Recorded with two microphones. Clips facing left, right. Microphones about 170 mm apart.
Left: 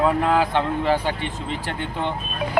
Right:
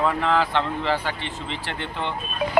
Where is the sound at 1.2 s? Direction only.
45° left (ahead or behind).